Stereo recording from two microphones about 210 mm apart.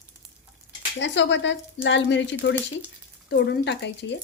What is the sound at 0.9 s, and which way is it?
Speech, 60° left (ahead or behind).